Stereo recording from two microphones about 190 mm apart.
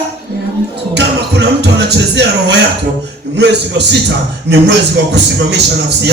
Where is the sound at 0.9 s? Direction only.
65° right (ahead or behind).